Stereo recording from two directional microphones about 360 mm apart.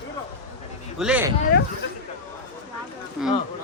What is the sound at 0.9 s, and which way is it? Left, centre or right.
Speech, centre.